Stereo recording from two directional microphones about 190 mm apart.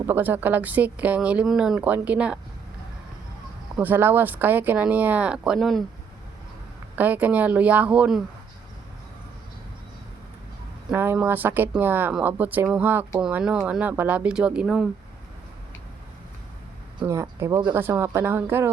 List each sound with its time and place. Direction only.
0.1 s speech: 10° right (ahead or behind)
3.8 s speech: 10° right (ahead or behind)
6.9 s speech: 10° right (ahead or behind)
10.9 s speech: 10° right (ahead or behind)
17.0 s speech: 15° right (ahead or behind)